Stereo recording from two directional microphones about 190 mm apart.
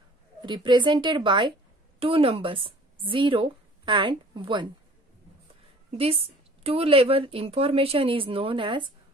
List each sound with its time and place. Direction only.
0.4 s a woman's voice: 25° right (ahead or behind)
5.9 s a woman's voice: 30° right (ahead or behind)